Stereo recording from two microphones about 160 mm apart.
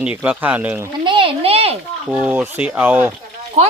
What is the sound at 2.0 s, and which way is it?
Speech, 10° right (ahead or behind).